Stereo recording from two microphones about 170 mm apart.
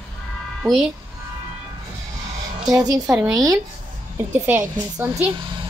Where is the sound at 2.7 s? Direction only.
20° right (ahead or behind).